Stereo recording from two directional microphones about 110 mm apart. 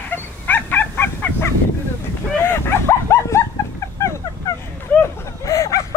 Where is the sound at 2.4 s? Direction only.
20° left (ahead or behind).